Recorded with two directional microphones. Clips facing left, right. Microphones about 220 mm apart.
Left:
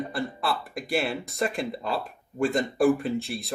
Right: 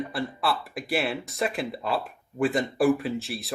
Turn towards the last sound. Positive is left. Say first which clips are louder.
# left 1 dB
turn(degrees=0)  # may be behind; listen again after turning